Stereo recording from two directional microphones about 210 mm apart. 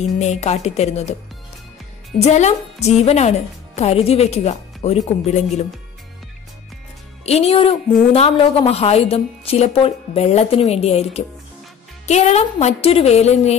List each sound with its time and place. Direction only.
0.2 s speech: 30° left (ahead or behind)
2.1 s speech: 30° left (ahead or behind)
7.2 s a woman's voice: 30° left (ahead or behind)